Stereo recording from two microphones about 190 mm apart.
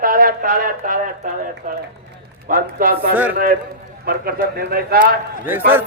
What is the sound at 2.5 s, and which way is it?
Speech, 45° right (ahead or behind).